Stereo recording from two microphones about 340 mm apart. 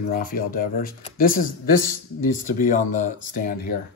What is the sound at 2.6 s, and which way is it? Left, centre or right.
Speech, left.